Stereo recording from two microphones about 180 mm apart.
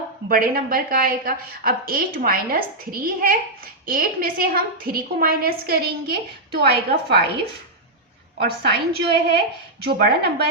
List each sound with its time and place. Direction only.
0.3 s a woman's voice: 55° right (ahead or behind)
8.4 s a woman's voice: 60° right (ahead or behind)